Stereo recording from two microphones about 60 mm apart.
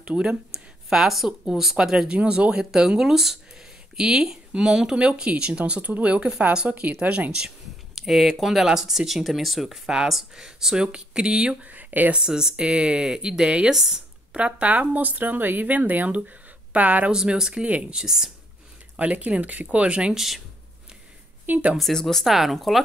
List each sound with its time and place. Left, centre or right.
0.0 s speech: centre
7.9 s speech: centre
11.6 s speech: right
12.2 s speech: centre
14.3 s speech: right
17.1 s speech: centre
17.9 s speech: centre
18.9 s speech: right
20.2 s speech: centre
21.5 s speech: right
21.7 s speech: centre